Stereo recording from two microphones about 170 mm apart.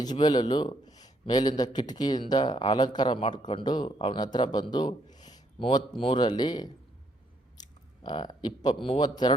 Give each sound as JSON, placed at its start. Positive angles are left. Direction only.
{"t": 0.0, "sound": "a man's voice", "side_deg": 25}
{"t": 8.0, "sound": "a man's voice", "side_deg": 25}